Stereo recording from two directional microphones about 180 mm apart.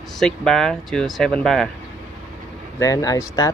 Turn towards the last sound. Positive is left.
turn(degrees=20)  # may be behind; listen again after turning